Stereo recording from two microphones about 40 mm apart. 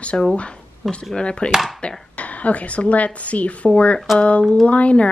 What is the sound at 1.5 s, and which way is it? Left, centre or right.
Speech, centre.